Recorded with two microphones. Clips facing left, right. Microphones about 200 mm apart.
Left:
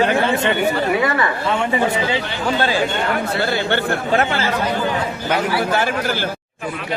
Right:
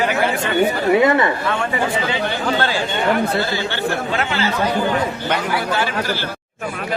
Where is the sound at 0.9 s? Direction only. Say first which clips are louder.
Right 4 dB; 20° right (ahead or behind).